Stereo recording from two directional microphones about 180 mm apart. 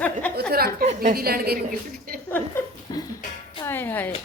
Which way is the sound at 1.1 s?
55° right (ahead or behind).